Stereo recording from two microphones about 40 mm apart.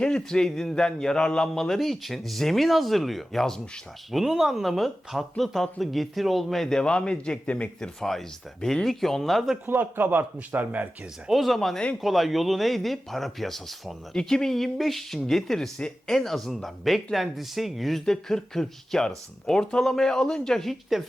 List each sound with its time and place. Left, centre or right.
0.0 s speech: centre
1.5 s speech: centre
6.7 s a man's voice: left
7.8 s speech: centre
9.6 s a man's voice: right
10.5 s speech: right
11.3 s speech: centre
14.2 s speech: centre
14.5 s speech: centre
18.0 s speech: centre
20.9 s speech: centre